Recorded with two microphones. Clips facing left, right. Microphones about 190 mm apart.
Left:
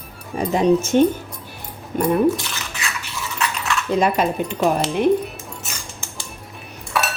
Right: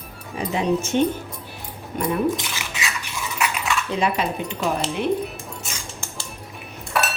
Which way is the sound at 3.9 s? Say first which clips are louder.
Left 6 dB; 45° left (ahead or behind).